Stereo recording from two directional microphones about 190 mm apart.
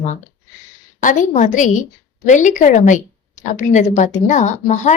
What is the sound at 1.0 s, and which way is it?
A woman's voice, 40° left (ahead or behind).